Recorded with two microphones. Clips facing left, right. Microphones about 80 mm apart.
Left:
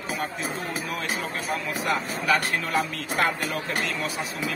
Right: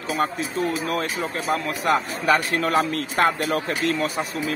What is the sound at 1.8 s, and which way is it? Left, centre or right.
Speech, right.